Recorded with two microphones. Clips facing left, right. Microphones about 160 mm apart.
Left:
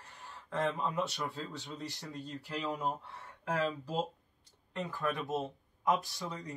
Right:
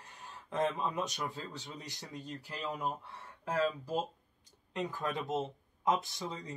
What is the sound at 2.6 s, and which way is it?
Speech, centre (ahead or behind).